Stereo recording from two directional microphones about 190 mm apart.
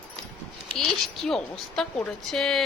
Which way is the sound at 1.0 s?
Centre (ahead or behind).